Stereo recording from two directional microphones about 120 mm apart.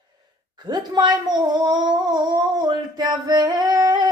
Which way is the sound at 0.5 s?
35° right (ahead or behind).